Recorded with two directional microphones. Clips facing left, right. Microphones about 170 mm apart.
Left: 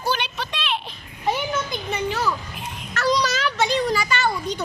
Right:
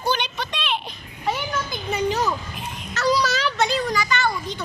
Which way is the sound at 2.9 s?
5° right (ahead or behind).